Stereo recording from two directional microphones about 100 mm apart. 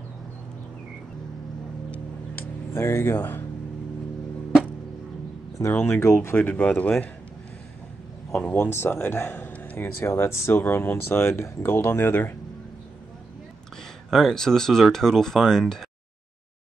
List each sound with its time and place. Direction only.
1.9 s music: 20° left (ahead or behind)
5.6 s speech: 20° left (ahead or behind)
8.3 s speech: 10° left (ahead or behind)
8.5 s speech: 25° left (ahead or behind)
14.1 s speech: 5° left (ahead or behind)